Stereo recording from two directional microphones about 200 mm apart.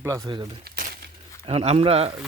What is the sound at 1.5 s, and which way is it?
Speech, 30° right (ahead or behind).